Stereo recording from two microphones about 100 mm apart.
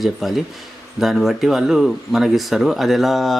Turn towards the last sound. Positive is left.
turn(degrees=0)  # may be behind; listen again after turning